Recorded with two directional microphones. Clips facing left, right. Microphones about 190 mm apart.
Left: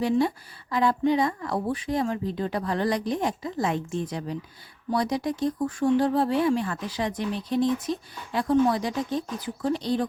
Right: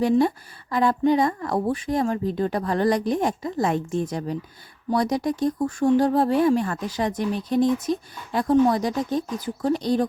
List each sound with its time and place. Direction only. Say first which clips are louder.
0.0 s speech: right 4 dB; 50° right (ahead or behind)